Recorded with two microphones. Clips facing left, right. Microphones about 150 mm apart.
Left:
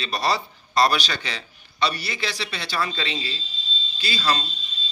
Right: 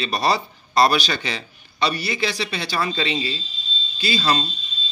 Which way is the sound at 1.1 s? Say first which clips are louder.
Right 4 dB; 15° right (ahead or behind).